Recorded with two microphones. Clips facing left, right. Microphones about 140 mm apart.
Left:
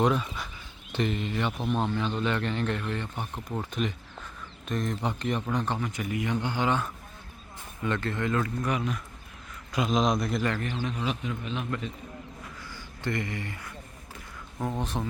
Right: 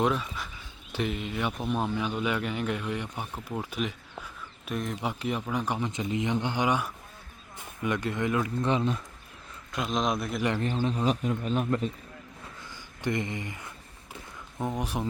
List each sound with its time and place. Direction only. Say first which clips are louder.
0.0 s speech: left 2 dB; centre (ahead or behind); by 8.5 s 15° right (ahead or behind)
8.6 s speech: right 3 dB; 30° right (ahead or behind)
9.7 s a man's voice: left 3 dB; centre (ahead or behind)
10.8 s a man's voice: right 6 dB; 35° right (ahead or behind)
12.5 s a sound: left 2 dB; 20° right (ahead or behind)
14.7 s speech: even; 10° right (ahead or behind)